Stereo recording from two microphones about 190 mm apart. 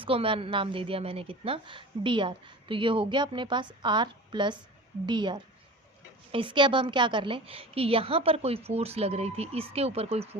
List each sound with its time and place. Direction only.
0.0 s a woman's voice: 30° right (ahead or behind)